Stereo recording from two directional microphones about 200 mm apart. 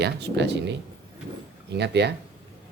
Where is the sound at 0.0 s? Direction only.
60° right (ahead or behind).